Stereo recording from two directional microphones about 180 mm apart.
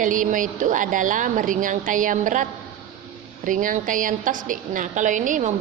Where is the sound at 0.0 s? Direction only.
45° right (ahead or behind).